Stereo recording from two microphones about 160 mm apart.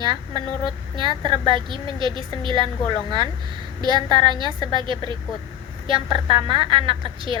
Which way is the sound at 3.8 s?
30° right (ahead or behind).